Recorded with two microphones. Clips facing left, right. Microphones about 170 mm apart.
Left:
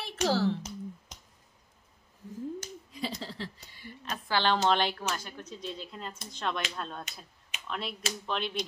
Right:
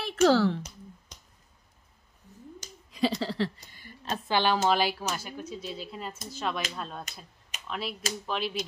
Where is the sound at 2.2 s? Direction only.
90° left.